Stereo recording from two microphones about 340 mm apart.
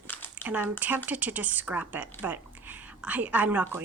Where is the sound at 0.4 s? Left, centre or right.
Centre.